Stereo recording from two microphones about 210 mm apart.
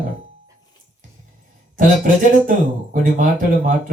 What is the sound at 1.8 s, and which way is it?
Speech, 40° right (ahead or behind).